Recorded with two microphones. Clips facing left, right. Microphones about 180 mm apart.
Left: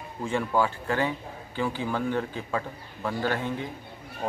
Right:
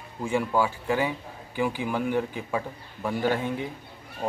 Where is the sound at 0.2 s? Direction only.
10° right (ahead or behind).